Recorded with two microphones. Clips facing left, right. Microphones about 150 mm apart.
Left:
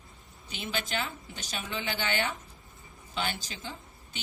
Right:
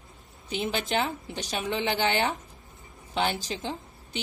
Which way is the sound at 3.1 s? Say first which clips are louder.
Right 7 dB; 65° right (ahead or behind).